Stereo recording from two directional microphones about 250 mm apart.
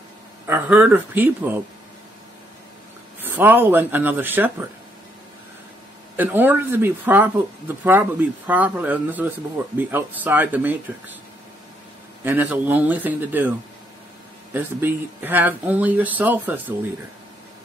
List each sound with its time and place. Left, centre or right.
0.5 s speech: centre
3.2 s speech: centre
6.1 s speech: centre
12.3 s speech: centre
14.5 s speech: centre